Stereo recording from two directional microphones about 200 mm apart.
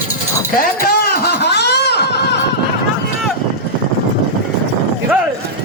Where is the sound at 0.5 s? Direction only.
45° left (ahead or behind).